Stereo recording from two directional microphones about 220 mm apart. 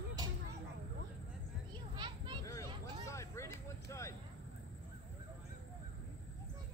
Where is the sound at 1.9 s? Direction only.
20° right (ahead or behind).